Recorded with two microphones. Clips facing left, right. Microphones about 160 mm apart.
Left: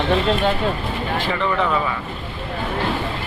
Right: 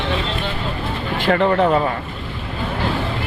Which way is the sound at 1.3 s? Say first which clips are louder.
Right 7 dB; 45° right (ahead or behind).